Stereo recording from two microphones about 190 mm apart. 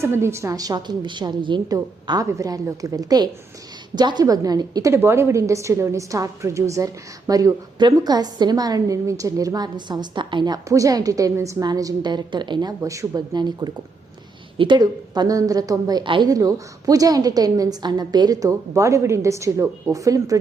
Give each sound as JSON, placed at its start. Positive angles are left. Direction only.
{"t": 0.0, "sound": "a woman's voice", "side_deg": -15}